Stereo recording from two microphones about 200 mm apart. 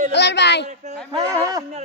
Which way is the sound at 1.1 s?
15° right (ahead or behind).